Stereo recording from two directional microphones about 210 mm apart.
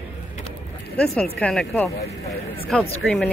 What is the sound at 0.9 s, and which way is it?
Speech, 5° left (ahead or behind).